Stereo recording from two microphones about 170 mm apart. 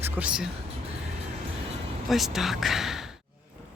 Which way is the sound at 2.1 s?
Centre (ahead or behind).